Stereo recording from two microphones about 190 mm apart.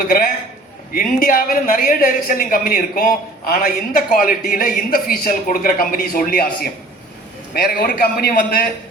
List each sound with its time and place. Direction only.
0.0 s a man's voice: 50° left (ahead or behind)